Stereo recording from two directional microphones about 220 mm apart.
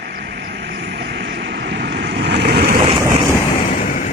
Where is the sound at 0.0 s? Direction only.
50° right (ahead or behind).